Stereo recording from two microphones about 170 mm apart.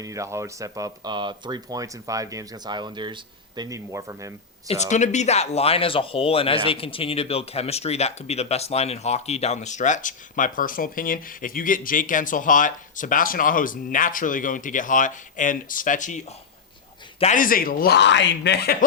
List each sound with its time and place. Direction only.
0.0 s speech: 20° right (ahead or behind)
4.7 s speech: 45° left (ahead or behind); by 18.9 s 65° left (ahead or behind)